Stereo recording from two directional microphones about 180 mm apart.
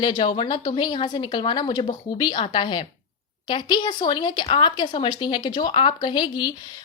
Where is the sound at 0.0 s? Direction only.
25° left (ahead or behind).